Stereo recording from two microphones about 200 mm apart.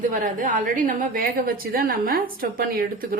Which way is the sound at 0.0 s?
40° right (ahead or behind).